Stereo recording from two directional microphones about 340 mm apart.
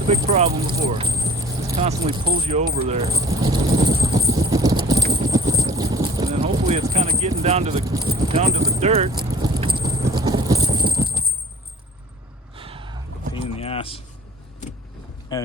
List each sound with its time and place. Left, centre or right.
0.1 s speech: centre
3.8 s clip-clop: centre
12.5 s a sound: centre
13.6 s vehicle: centre
15.3 s speech: centre